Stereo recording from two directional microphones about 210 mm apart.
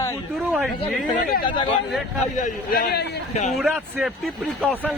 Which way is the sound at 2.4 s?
45° left (ahead or behind).